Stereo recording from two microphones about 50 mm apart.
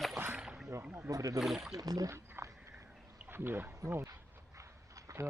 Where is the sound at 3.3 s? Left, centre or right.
Right.